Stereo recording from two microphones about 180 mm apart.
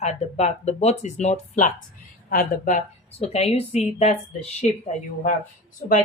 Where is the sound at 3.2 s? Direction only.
35° left (ahead or behind).